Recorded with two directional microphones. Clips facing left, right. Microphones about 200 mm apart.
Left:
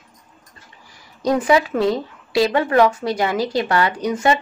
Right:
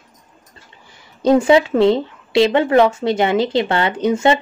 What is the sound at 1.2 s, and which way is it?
Speech, 25° right (ahead or behind).